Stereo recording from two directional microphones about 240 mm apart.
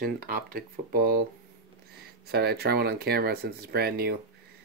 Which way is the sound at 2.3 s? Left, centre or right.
Right.